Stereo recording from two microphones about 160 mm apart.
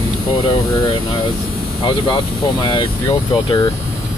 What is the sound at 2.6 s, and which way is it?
Speech, 30° left (ahead or behind).